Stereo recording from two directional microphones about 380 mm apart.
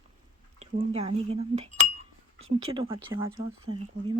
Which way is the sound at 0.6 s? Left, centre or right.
Centre.